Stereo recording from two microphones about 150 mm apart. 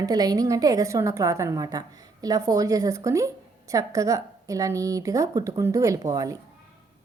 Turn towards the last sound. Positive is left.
turn(degrees=-25)  # may be behind; listen again after turning